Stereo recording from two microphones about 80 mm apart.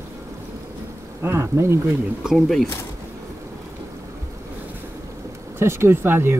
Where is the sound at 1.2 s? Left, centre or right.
Right.